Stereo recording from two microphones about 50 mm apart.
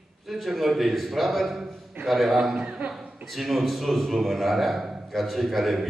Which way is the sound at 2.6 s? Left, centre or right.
Right.